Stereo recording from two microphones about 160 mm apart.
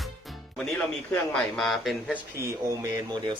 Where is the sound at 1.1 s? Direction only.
5° left (ahead or behind).